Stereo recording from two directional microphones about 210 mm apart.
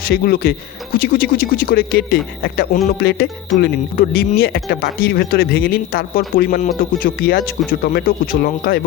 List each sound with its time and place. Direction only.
0.0 s speech: 45° left (ahead or behind)